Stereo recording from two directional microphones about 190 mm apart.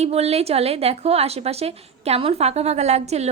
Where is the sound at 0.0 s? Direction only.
35° right (ahead or behind).